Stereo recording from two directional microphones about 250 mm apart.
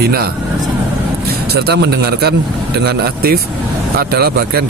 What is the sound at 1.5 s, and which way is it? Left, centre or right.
Speech, right.